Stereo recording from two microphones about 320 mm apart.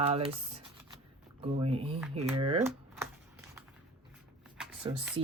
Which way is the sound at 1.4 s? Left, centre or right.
Centre.